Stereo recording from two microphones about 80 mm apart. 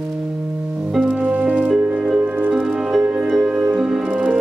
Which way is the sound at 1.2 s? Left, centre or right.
Centre.